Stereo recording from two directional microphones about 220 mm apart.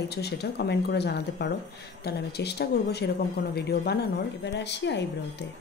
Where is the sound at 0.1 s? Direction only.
45° left (ahead or behind).